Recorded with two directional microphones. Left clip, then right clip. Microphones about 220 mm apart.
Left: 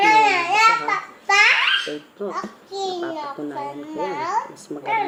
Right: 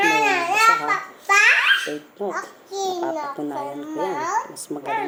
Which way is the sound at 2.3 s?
25° right (ahead or behind).